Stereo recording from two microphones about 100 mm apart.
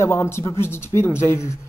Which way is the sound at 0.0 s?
25° left (ahead or behind).